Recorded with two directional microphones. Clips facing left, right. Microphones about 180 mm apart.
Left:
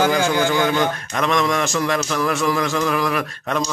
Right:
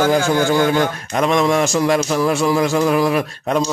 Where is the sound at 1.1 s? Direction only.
30° right (ahead or behind).